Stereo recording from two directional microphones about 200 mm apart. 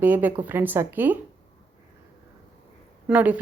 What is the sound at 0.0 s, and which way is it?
A woman's voice, 10° right (ahead or behind).